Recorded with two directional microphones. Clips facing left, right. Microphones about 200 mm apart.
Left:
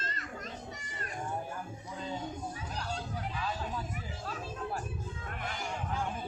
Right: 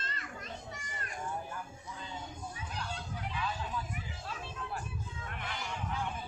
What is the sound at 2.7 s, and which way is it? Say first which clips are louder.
Children playing: left 2 dB; 40° left (ahead or behind).